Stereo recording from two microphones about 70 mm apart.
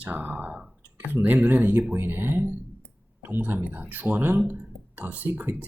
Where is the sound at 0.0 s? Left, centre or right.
Right.